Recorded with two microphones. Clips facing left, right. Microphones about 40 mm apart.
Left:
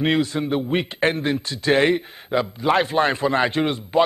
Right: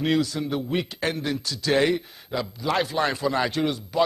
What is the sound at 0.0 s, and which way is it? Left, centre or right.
A man's voice, left.